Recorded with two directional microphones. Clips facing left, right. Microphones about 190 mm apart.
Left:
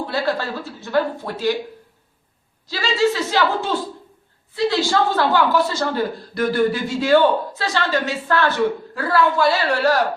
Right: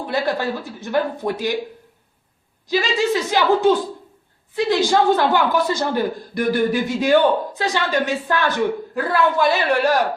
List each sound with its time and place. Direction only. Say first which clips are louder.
0.0 s a woman's voice: right 1 dB; 15° right (ahead or behind)
2.6 s a woman's voice: even; 15° right (ahead or behind)